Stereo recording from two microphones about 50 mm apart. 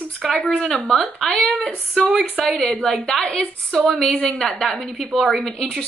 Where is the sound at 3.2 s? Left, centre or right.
Centre.